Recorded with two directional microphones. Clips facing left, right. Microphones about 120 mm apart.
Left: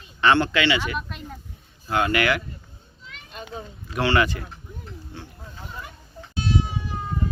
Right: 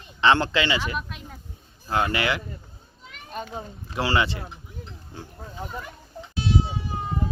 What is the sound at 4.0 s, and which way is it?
Speech, 25° right (ahead or behind).